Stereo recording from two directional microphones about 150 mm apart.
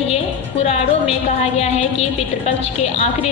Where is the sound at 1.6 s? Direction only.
45° left (ahead or behind).